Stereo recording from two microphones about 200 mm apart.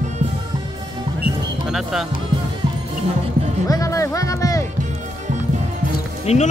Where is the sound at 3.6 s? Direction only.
15° left (ahead or behind).